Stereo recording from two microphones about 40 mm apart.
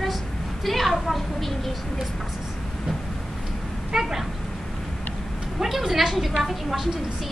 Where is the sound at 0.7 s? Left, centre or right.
Centre.